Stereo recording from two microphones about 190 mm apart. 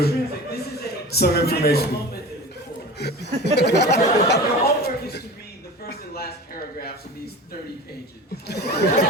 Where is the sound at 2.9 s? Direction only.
60° left (ahead or behind).